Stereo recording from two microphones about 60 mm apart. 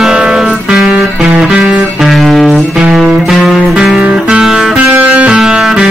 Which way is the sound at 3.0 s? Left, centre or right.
Centre.